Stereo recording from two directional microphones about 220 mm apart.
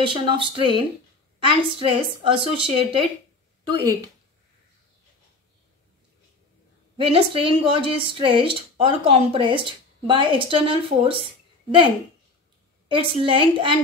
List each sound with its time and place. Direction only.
0.0 s speech: 20° right (ahead or behind)
7.0 s speech: 25° right (ahead or behind)
12.8 s speech: 25° right (ahead or behind)